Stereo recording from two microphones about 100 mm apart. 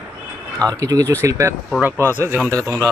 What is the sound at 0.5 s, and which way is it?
Speech, 35° right (ahead or behind).